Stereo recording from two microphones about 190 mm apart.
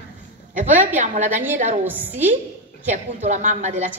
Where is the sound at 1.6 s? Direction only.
40° right (ahead or behind).